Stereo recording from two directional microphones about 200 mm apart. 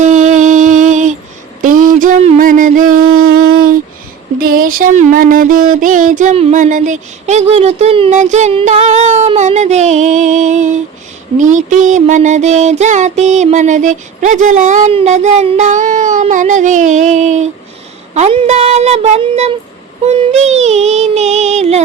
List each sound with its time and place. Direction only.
0.0 s music: 35° right (ahead or behind)
1.6 s mantra: 40° right (ahead or behind)
4.4 s a sound: 45° right (ahead or behind)